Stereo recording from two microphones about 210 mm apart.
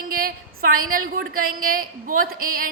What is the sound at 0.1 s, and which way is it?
A woman's voice, 45° right (ahead or behind).